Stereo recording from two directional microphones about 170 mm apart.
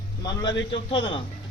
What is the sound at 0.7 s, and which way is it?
Speech, 30° left (ahead or behind).